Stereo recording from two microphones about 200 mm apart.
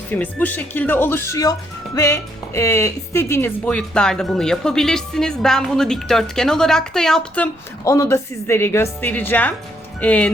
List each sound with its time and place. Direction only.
0.1 s speech: 10° left (ahead or behind)